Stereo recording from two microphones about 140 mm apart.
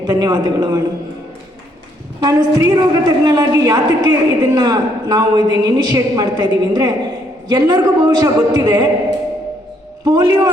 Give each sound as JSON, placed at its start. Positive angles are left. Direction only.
{"t": 0.0, "sound": "a woman's voice", "side_deg": -30}
{"t": 2.2, "sound": "a woman's voice", "side_deg": -25}
{"t": 10.0, "sound": "a woman's voice", "side_deg": -30}